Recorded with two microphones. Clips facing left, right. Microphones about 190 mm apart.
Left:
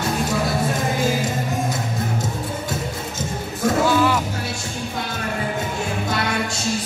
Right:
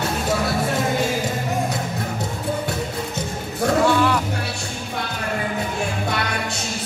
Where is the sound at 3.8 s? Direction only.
Centre (ahead or behind).